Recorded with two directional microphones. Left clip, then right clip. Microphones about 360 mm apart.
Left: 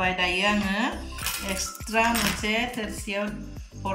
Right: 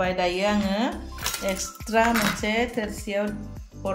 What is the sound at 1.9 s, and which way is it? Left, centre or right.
Speech, centre.